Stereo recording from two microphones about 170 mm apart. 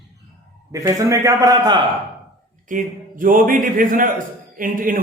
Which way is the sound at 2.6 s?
55° right (ahead or behind).